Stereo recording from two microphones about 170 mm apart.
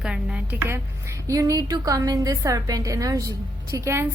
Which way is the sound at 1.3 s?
20° right (ahead or behind).